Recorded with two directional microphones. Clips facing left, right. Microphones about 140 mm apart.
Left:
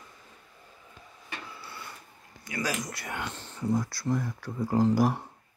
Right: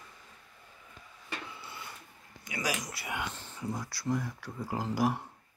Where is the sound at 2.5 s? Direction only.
15° right (ahead or behind).